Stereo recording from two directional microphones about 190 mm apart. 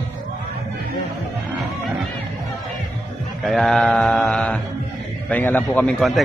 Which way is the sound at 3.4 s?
Centre (ahead or behind).